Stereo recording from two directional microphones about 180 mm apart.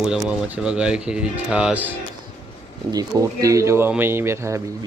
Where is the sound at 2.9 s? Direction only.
20° right (ahead or behind).